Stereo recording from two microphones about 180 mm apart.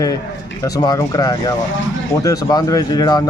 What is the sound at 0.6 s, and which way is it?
Speech, 20° left (ahead or behind).